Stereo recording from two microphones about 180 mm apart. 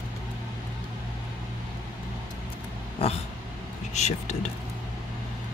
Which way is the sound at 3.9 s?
40° left (ahead or behind).